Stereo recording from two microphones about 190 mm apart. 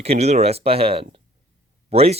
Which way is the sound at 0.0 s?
35° right (ahead or behind).